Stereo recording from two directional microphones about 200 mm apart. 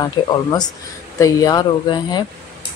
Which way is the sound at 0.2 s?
20° left (ahead or behind).